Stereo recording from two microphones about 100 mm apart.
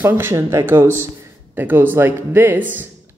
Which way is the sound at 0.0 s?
25° right (ahead or behind).